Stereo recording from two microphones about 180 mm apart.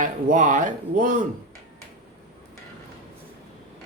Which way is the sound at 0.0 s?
45° right (ahead or behind).